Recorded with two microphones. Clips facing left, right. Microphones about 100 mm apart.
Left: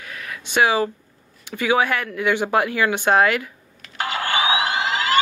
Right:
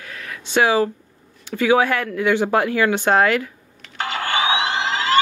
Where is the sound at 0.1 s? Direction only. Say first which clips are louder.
Right 3 dB; 15° left (ahead or behind).